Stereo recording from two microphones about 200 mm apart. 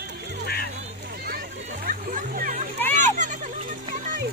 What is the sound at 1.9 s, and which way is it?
Music, 45° right (ahead or behind).